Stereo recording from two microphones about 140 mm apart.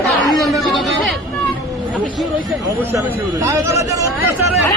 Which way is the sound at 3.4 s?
20° right (ahead or behind).